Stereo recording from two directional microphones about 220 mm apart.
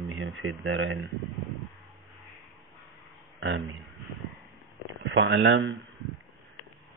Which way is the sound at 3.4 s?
60° right (ahead or behind).